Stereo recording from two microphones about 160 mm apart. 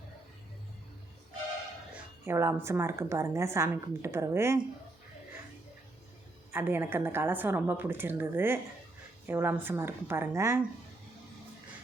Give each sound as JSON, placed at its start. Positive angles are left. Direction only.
{"t": 1.9, "sound": "a woman's voice", "side_deg": -15}
{"t": 6.5, "sound": "a woman's voice", "side_deg": -15}